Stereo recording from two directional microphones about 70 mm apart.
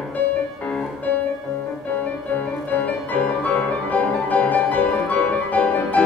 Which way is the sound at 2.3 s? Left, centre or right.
Left.